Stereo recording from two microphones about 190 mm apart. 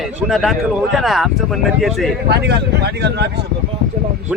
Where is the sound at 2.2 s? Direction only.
60° right (ahead or behind).